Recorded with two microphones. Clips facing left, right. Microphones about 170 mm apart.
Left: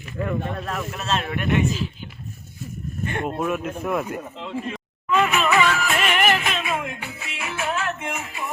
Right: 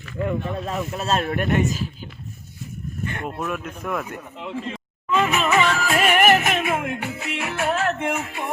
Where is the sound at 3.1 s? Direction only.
20° left (ahead or behind).